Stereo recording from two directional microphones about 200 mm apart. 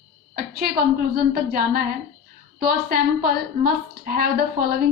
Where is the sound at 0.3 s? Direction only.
50° right (ahead or behind).